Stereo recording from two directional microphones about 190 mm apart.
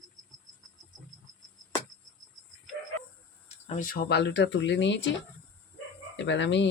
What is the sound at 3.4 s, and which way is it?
Speech, 45° left (ahead or behind).